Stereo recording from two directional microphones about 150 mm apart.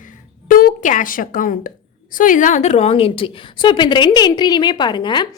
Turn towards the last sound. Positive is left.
turn(degrees=30)  # may be behind; listen again after turning